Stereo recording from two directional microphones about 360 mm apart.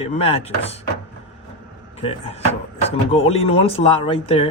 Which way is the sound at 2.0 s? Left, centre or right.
Centre.